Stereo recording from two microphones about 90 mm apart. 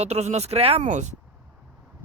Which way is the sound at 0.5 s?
80° right.